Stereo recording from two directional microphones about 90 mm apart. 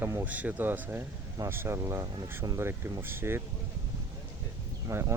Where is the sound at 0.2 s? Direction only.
15° right (ahead or behind).